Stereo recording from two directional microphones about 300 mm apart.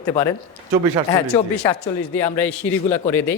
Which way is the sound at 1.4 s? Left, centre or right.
Centre.